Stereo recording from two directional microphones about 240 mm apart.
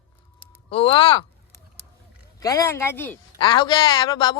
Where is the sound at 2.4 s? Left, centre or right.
Centre.